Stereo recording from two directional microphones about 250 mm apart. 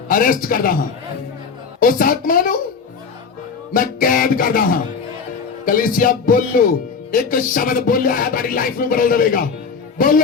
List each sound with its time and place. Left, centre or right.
0.1 s speech: left
1.8 s speech: left
3.7 s speech: left